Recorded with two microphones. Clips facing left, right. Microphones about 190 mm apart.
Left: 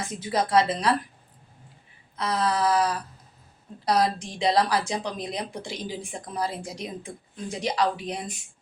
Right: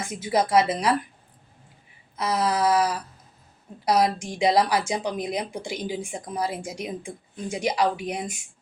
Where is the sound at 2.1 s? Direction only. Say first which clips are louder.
Right 1 dB; 20° right (ahead or behind).